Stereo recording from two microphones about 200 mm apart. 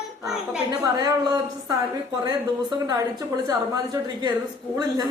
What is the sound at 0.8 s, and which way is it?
A woman's voice, 20° right (ahead or behind).